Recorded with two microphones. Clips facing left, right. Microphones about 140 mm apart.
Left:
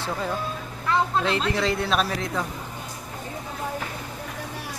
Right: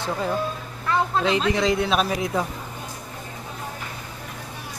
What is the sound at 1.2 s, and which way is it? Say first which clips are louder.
A man's voice: right 3 dB; centre (ahead or behind).